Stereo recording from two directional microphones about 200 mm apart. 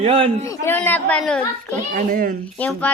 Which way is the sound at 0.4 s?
15° left (ahead or behind).